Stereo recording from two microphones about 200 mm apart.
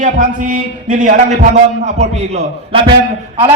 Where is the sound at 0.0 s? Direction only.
40° right (ahead or behind).